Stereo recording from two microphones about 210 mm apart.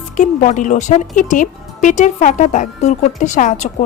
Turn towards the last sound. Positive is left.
turn(degrees=35)  # may be behind; listen again after turning